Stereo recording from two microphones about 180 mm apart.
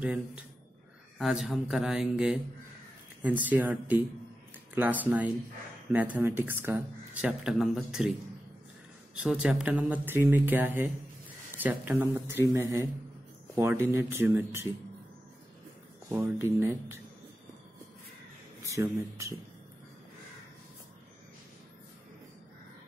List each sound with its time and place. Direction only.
1.1 s speech: centre (ahead or behind)
9.1 s speech: 5° right (ahead or behind)
16.1 s speech: 15° right (ahead or behind)
18.7 s speech: 15° right (ahead or behind)